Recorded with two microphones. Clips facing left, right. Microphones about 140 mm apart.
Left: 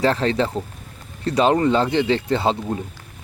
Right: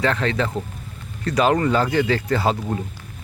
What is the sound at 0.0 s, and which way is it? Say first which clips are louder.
Speech: left 2 dB; 35° left (ahead or behind).